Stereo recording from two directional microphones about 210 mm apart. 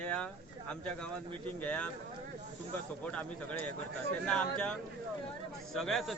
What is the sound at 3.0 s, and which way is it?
A man's voice, 5° left (ahead or behind).